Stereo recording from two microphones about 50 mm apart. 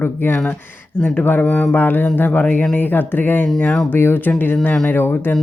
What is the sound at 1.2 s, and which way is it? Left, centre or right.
Speech, left.